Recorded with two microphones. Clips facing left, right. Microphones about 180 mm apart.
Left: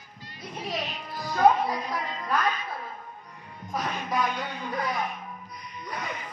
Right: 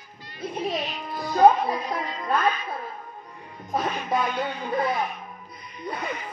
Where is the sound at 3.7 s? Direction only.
25° right (ahead or behind).